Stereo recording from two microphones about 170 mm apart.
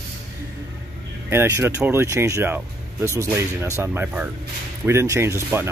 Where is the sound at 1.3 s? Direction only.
15° right (ahead or behind).